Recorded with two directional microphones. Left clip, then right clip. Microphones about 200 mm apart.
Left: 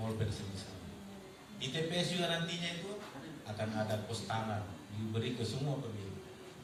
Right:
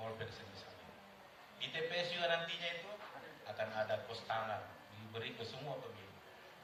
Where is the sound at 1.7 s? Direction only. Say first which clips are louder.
Left 3 dB; centre (ahead or behind).